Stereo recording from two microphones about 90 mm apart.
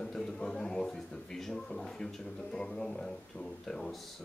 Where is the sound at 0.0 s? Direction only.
5° left (ahead or behind).